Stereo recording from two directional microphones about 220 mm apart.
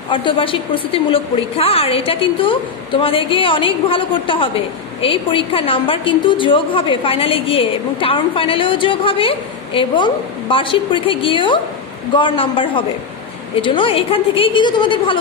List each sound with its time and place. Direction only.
0.1 s a woman's voice: 25° left (ahead or behind)